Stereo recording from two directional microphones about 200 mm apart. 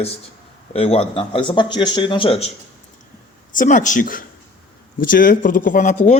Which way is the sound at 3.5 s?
40° left (ahead or behind).